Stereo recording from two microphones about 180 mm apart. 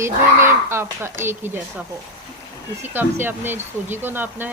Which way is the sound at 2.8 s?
10° right (ahead or behind).